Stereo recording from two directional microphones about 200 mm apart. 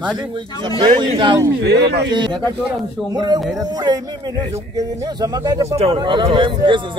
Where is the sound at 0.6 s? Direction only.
25° right (ahead or behind).